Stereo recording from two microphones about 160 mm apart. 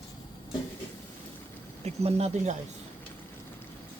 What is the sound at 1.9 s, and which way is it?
Speech, 40° right (ahead or behind).